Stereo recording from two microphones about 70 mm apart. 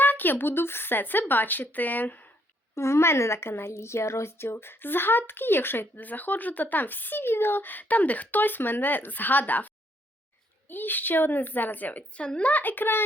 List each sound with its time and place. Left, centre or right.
0.0 s a woman's voice: left
2.7 s a woman's voice: left